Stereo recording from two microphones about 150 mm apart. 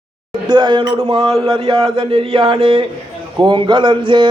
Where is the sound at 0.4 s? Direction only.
30° right (ahead or behind).